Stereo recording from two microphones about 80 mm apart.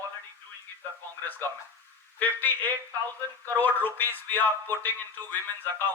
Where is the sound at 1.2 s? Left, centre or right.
Left.